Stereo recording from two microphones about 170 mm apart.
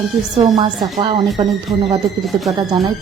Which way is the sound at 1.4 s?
25° right (ahead or behind).